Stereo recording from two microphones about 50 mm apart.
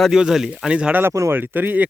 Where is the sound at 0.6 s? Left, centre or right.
Centre.